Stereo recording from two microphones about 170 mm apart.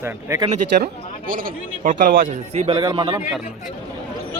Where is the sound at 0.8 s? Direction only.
55° right (ahead or behind); by 3.2 s 25° right (ahead or behind).